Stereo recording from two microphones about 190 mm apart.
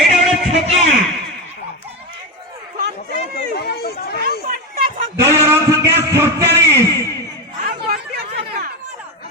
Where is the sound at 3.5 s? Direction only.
55° left (ahead or behind).